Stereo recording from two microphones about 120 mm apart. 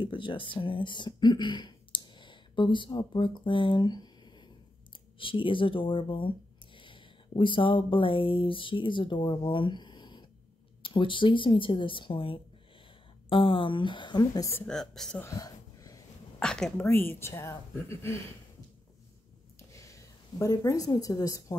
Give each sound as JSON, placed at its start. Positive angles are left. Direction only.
{"t": 0.0, "sound": "speech", "side_deg": 45}
{"t": 9.5, "sound": "a sound", "side_deg": 40}
{"t": 10.8, "sound": "speech", "side_deg": 45}
{"t": 14.7, "sound": "speech", "side_deg": 5}
{"t": 15.2, "sound": "whispering", "side_deg": 30}
{"t": 16.3, "sound": "speech", "side_deg": 5}
{"t": 16.8, "sound": "speech", "side_deg": 20}
{"t": 19.7, "sound": "a woman's voice", "side_deg": 25}